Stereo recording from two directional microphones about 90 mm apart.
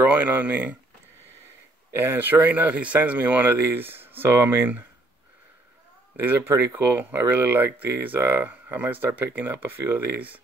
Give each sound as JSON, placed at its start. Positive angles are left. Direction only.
{"t": 0.0, "sound": "speech", "side_deg": -15}
{"t": 1.9, "sound": "speech", "side_deg": -25}
{"t": 6.1, "sound": "speech", "side_deg": -25}